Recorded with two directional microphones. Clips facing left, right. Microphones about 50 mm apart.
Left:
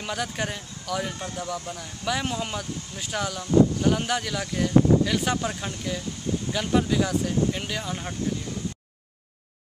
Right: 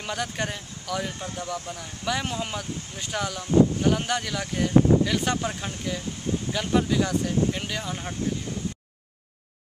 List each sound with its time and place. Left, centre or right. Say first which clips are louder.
0.0 s speech: even; centre